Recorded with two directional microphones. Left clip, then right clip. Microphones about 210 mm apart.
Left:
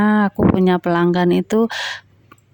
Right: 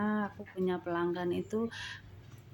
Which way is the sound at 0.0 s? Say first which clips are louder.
Left 19 dB; 55° left (ahead or behind).